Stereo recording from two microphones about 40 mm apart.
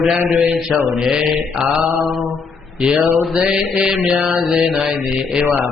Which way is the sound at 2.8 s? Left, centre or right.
Right.